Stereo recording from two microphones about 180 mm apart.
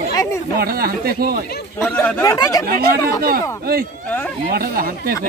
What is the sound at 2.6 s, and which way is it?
Speech, 55° right (ahead or behind).